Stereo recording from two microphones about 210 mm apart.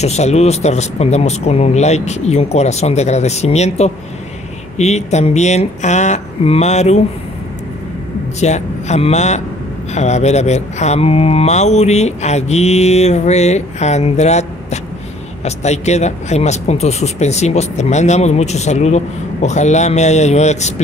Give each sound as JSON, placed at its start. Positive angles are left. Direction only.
{"t": 0.0, "sound": "speech", "side_deg": 30}
{"t": 8.4, "sound": "speech", "side_deg": 35}